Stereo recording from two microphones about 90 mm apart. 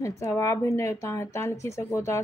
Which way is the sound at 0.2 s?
35° left (ahead or behind).